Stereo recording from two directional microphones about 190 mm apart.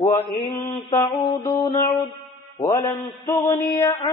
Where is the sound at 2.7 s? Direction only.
15° left (ahead or behind).